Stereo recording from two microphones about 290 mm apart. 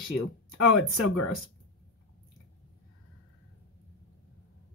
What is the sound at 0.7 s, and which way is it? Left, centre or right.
Speech, left.